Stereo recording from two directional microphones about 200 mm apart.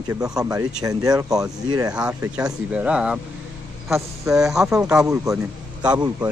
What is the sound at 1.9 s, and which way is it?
Speech, 5° right (ahead or behind).